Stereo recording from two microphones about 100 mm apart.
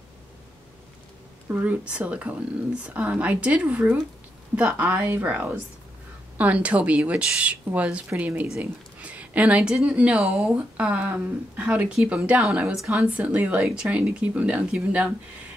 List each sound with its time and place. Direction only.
1.5 s speech: 15° right (ahead or behind)